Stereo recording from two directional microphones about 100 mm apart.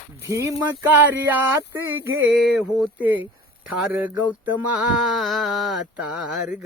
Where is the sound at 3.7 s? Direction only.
15° right (ahead or behind).